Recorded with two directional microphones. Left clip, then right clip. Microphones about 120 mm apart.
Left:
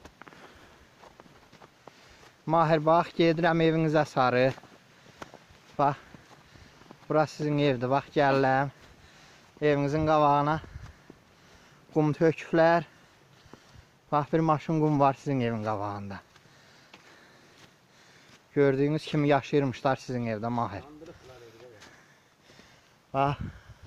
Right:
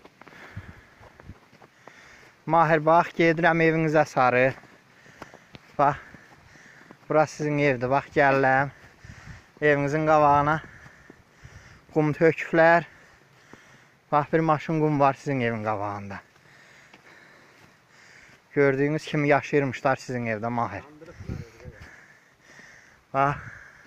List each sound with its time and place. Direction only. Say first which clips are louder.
2.4 s speech: right 4 dB; 25° left (ahead or behind)
5.8 s speech: right 4 dB; 15° left (ahead or behind)
7.1 s speech: right 4 dB; 20° left (ahead or behind)
11.9 s speech: right 4 dB; 15° left (ahead or behind)
14.1 s speech: right 4 dB; 20° left (ahead or behind)
18.5 s speech: right 3 dB; 30° left (ahead or behind)